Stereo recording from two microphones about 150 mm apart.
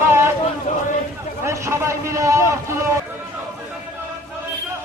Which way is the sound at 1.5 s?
20° right (ahead or behind).